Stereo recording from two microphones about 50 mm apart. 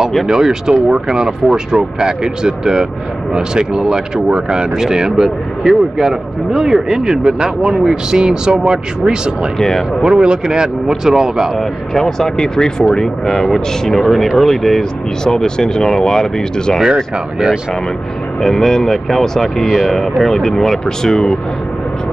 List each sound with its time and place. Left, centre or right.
0.3 s speech: centre
9.6 s speech: centre
10.0 s speech: centre
11.5 s speech: centre
16.8 s speech: centre
18.4 s speech: centre